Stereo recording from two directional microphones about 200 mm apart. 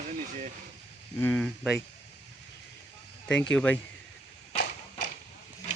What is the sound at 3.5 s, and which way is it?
Speech, 10° left (ahead or behind).